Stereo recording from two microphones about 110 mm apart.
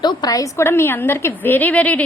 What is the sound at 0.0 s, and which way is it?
A woman's voice, 40° left (ahead or behind).